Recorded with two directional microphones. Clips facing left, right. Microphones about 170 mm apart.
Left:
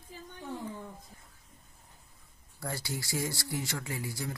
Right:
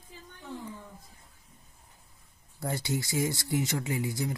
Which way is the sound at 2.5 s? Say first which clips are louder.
Right 6 dB; 20° right (ahead or behind).